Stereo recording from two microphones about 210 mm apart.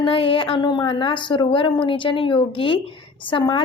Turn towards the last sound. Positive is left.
turn(degrees=20)  # may be behind; listen again after turning